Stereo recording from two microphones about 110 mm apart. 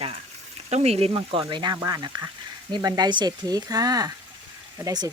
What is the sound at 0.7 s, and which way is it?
Speech, 70° right (ahead or behind).